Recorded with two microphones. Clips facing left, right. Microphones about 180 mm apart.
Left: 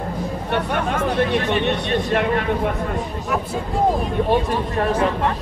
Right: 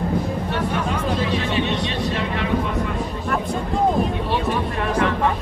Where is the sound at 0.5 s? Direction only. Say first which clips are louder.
Left 1 dB; 60° left (ahead or behind).